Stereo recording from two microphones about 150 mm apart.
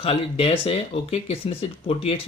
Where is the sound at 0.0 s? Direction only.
40° left (ahead or behind).